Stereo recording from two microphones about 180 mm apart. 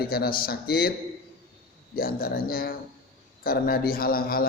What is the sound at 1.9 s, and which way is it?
Speech, 55° left (ahead or behind).